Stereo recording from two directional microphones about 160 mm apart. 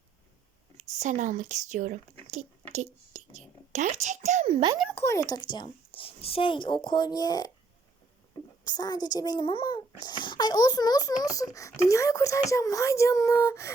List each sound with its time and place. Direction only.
0.8 s speech: 50° right (ahead or behind)
4.9 s a child's voice: 15° left (ahead or behind)
8.6 s a child's voice: 25° left (ahead or behind)